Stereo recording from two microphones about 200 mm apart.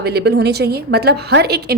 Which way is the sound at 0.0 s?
55° right (ahead or behind).